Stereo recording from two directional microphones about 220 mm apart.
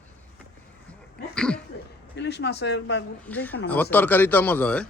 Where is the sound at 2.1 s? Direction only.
50° left (ahead or behind).